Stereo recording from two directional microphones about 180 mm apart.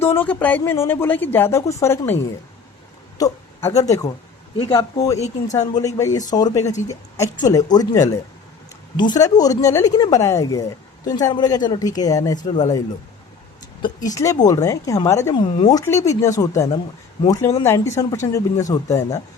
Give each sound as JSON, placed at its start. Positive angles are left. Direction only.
{"t": 0.0, "sound": "speech", "side_deg": 10}
{"t": 3.2, "sound": "a woman's voice", "side_deg": 20}
{"t": 14.1, "sound": "speech", "side_deg": 20}